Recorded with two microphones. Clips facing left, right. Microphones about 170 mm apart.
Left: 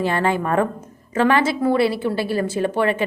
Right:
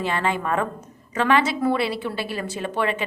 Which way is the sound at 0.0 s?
35° left (ahead or behind).